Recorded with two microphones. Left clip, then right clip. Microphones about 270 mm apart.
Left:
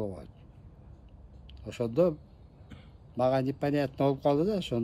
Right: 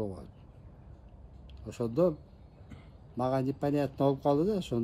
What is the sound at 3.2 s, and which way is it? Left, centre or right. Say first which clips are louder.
Speech: left 3 dB; left.